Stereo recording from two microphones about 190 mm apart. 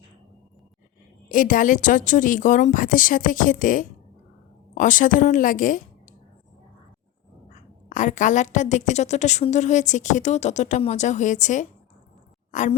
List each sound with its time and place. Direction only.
1.3 s a woman's voice: 45° left (ahead or behind)
7.9 s a woman's voice: 40° left (ahead or behind)